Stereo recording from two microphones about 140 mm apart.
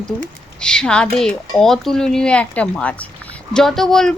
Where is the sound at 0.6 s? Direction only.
5° left (ahead or behind).